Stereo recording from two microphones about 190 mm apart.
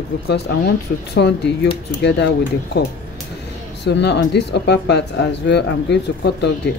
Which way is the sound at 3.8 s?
65° left (ahead or behind).